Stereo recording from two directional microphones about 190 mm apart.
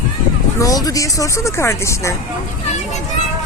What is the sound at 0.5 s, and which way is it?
Speech, 20° left (ahead or behind).